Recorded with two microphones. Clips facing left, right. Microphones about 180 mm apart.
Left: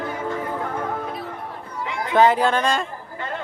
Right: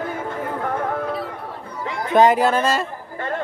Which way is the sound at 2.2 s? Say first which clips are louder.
Right 2 dB; 10° right (ahead or behind).